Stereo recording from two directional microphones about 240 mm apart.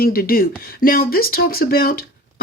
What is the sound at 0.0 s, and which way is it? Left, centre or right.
Speech, left.